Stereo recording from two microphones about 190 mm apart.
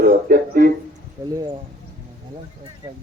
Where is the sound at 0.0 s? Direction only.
50° right (ahead or behind).